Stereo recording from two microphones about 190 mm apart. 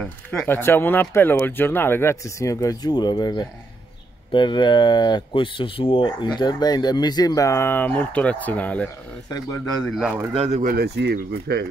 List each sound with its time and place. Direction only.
0.0 s a man's voice: 5° left (ahead or behind)
10.3 s speech: 30° right (ahead or behind)
10.6 s speech: 50° right (ahead or behind)